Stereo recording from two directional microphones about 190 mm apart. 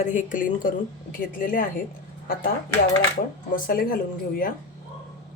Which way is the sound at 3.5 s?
50° left (ahead or behind).